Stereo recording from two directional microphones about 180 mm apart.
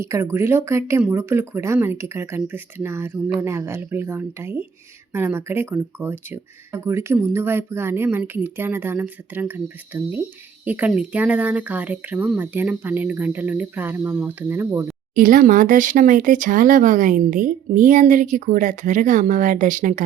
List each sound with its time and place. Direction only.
0.0 s speech: 15° right (ahead or behind)
15.1 s speech: 50° right (ahead or behind)